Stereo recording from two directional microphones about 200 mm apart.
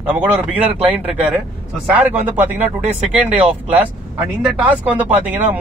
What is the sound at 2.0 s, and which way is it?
Speech, 10° right (ahead or behind).